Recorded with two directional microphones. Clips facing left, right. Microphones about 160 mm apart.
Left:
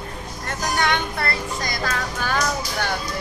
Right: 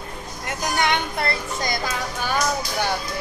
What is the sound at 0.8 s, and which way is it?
Speech, 20° right (ahead or behind).